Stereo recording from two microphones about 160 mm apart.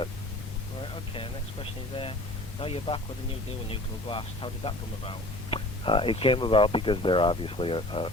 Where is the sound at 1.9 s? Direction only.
35° left (ahead or behind).